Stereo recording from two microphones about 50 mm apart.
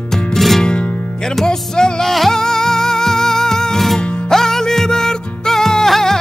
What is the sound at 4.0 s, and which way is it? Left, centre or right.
Music, centre.